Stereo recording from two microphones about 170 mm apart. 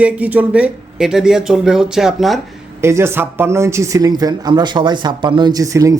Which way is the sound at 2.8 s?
15° right (ahead or behind).